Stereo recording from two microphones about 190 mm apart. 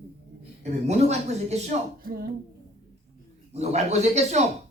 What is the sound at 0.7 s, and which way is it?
Speech, 35° right (ahead or behind).